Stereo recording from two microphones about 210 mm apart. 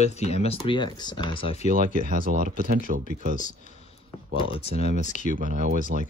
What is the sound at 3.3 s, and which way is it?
Speech, 35° left (ahead or behind).